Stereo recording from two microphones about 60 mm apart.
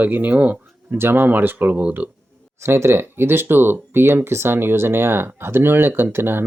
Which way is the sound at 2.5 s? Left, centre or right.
Right.